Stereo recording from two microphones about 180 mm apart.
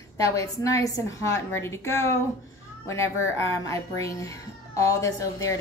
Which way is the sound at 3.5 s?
15° left (ahead or behind).